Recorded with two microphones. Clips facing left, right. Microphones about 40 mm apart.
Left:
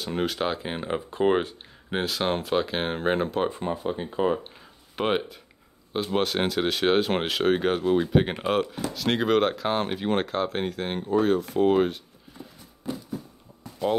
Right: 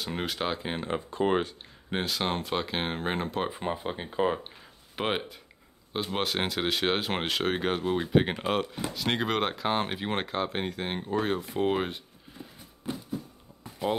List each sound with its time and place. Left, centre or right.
0.0 s speech: centre
3.6 s speech: centre
4.9 s speech: centre
13.8 s speech: right